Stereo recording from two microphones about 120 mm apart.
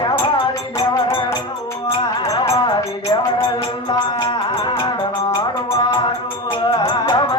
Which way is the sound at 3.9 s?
35° left (ahead or behind).